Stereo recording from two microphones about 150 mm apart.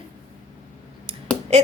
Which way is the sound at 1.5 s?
45° right (ahead or behind).